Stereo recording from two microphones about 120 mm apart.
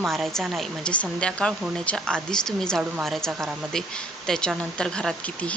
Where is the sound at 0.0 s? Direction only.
Centre (ahead or behind).